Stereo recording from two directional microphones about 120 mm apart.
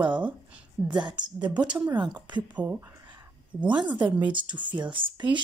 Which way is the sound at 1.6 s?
10° right (ahead or behind).